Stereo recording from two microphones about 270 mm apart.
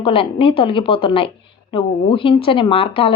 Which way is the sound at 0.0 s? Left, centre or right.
Centre.